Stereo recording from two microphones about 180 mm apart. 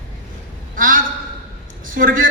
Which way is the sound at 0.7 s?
50° right (ahead or behind).